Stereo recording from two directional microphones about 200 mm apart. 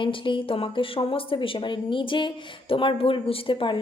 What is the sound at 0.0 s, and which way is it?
A woman's voice, 25° left (ahead or behind).